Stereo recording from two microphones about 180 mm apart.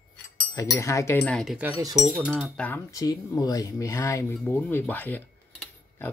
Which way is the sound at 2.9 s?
20° left (ahead or behind).